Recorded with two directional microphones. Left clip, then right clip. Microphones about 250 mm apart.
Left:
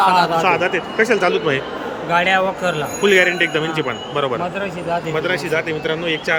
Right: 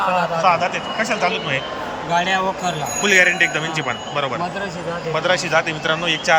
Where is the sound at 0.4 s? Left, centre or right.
Centre.